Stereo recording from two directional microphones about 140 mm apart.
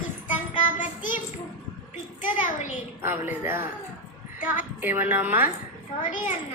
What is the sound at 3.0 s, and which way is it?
Speech, 15° right (ahead or behind).